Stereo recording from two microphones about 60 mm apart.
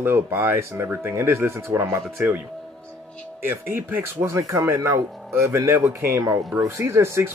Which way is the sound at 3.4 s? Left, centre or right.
Right.